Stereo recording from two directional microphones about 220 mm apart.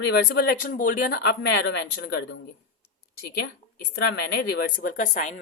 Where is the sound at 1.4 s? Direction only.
50° left (ahead or behind).